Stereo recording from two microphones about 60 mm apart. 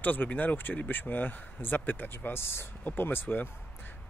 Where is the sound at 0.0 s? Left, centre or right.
Left.